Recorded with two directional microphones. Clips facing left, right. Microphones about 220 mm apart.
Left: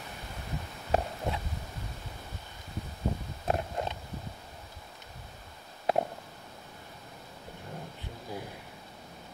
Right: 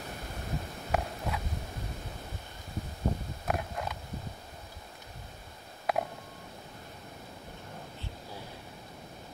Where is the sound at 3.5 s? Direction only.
25° left (ahead or behind).